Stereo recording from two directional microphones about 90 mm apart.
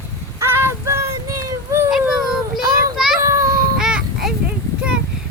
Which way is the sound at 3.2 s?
35° right (ahead or behind).